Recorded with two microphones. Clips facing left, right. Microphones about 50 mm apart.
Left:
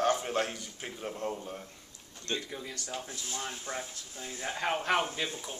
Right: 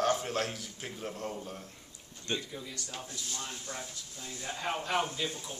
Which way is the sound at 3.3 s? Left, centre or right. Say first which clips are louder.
Left 5 dB; left.